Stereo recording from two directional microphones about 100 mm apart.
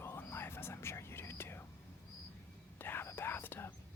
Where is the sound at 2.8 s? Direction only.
20° left (ahead or behind).